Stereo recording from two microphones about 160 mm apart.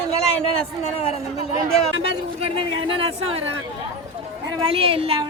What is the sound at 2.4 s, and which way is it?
Speech, 35° right (ahead or behind).